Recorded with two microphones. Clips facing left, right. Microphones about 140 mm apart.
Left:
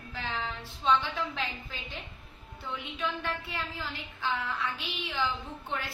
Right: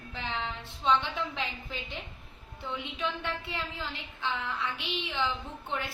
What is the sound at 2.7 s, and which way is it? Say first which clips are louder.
A woman's voice: even; 25° right (ahead or behind).